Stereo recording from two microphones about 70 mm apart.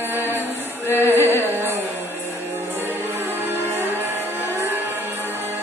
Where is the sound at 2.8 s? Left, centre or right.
Right.